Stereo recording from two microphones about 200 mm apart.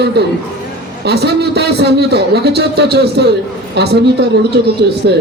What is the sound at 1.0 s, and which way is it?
A man's voice, 55° right (ahead or behind).